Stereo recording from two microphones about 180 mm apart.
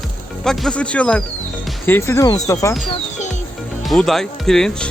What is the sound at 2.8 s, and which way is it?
Music, 40° left (ahead or behind).